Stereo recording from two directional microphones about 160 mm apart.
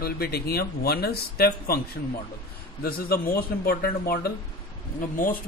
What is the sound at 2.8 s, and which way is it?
Speech, 70° left (ahead or behind).